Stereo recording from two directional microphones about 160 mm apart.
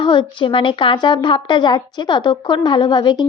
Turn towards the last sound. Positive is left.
turn(degrees=30)  # may be behind; listen again after turning